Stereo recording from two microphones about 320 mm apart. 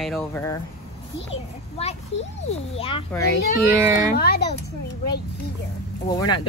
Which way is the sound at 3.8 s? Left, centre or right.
Centre.